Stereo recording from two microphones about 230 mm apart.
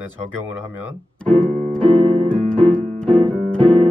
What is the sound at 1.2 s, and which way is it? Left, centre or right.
Music, centre.